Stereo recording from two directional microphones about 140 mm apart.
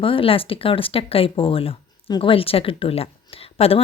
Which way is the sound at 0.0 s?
40° left (ahead or behind).